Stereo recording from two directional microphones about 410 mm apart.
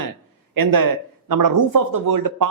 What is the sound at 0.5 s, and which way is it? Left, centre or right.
Speech, right.